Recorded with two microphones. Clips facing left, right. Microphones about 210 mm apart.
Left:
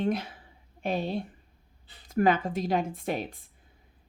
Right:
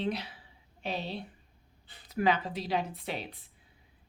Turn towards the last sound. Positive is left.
turn(degrees=45)  # may be behind; listen again after turning